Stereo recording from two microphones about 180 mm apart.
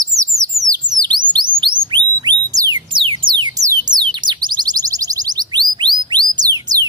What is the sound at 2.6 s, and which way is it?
Music, 25° right (ahead or behind).